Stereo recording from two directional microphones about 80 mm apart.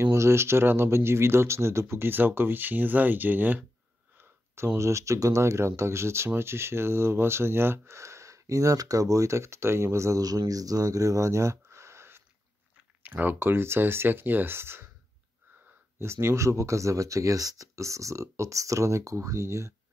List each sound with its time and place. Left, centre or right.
0.0 s speech: right
13.0 s speech: right
16.0 s speech: right